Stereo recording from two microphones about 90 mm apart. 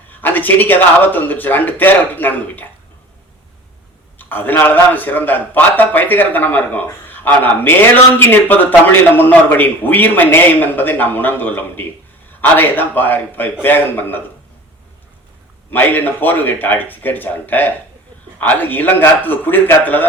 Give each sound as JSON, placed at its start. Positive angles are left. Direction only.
{"t": 0.2, "sound": "a man's voice", "side_deg": 20}
{"t": 4.2, "sound": "a man's voice", "side_deg": 20}
{"t": 15.7, "sound": "a man's voice", "side_deg": 20}